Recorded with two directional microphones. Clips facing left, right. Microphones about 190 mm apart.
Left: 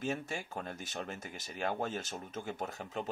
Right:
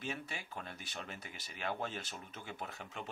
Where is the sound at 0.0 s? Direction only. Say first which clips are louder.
Left 6 dB; 45° left (ahead or behind).